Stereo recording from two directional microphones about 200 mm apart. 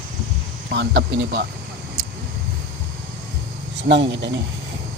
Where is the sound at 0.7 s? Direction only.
60° right (ahead or behind).